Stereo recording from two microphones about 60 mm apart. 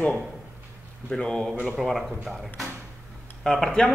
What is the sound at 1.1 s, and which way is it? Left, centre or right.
Speech, centre.